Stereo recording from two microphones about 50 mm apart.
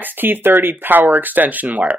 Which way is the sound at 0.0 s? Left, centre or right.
Right.